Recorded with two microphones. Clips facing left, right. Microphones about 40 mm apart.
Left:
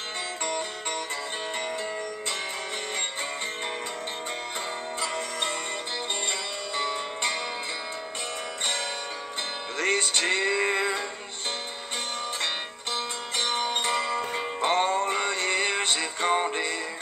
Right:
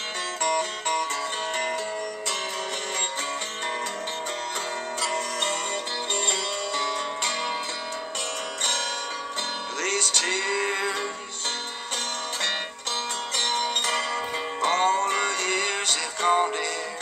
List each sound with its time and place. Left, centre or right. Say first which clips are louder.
0.4 s music: right 8 dB; right
5.1 s music: right 3 dB; right
9.8 s music: left 2 dB; left
13.4 s music: right 1 dB; centre